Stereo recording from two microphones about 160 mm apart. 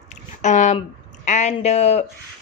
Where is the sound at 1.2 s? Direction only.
45° left (ahead or behind).